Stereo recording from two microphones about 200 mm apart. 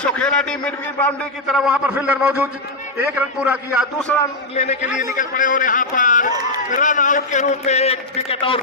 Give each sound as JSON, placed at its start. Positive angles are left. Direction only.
{"t": 0.0, "sound": "a man's voice", "side_deg": 5}
{"t": 4.1, "sound": "a man's voice", "side_deg": 5}
{"t": 4.5, "sound": "a man's voice", "side_deg": 35}